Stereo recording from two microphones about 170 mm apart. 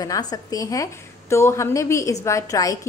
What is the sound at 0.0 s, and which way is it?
A woman's voice, 20° left (ahead or behind).